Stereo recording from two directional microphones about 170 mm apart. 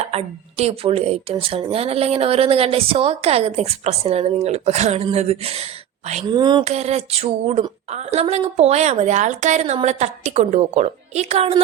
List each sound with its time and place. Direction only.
0.0 s a woman's voice: 40° right (ahead or behind)
6.2 s speech: 25° right (ahead or behind)
6.7 s a woman's voice: 40° right (ahead or behind)